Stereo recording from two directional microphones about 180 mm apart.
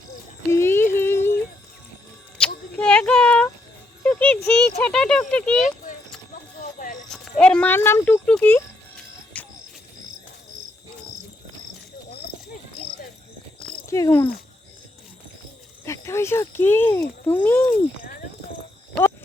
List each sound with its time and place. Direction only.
0.5 s a sound: 15° left (ahead or behind)
2.4 s a sound: 5° left (ahead or behind)
4.0 s music: 10° left (ahead or behind)
4.8 s speech: 5° left (ahead or behind)
5.5 s a sound: 45° left (ahead or behind)
7.1 s speech: 5° left (ahead or behind)
9.3 s music: 5° left (ahead or behind)
13.9 s speech: 15° left (ahead or behind)
15.8 s speech: 15° left (ahead or behind)